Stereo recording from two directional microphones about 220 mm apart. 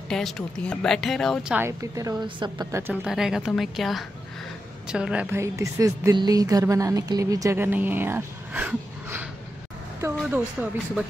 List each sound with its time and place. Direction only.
0.1 s speech: 5° left (ahead or behind)
1.6 s a woman's voice: 15° right (ahead or behind)
2.9 s a woman's voice: 5° right (ahead or behind)